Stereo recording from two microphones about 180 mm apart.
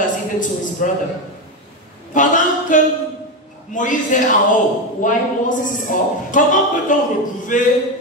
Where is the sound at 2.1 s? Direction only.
45° left (ahead or behind).